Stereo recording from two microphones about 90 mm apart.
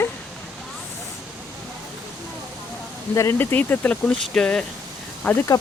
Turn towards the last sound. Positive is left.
turn(degrees=45)  # may be behind; listen again after turning